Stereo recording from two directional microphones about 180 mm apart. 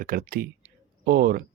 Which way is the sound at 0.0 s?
55° right (ahead or behind).